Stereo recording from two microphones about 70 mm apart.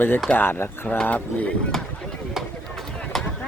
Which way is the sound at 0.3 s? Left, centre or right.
Left.